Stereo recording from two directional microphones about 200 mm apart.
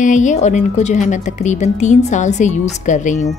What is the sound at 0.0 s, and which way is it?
A woman's voice, 40° left (ahead or behind).